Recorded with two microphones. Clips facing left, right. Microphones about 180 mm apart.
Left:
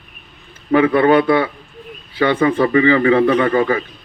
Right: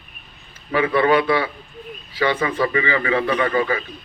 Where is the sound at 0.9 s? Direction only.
50° left (ahead or behind).